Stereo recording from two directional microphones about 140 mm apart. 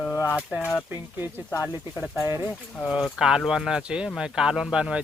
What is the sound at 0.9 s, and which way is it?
Speech, 15° right (ahead or behind).